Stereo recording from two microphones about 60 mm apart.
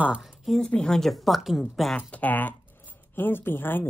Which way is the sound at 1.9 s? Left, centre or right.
Left.